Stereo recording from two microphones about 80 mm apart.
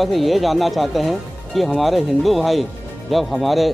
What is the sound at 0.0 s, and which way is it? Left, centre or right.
Speech, centre.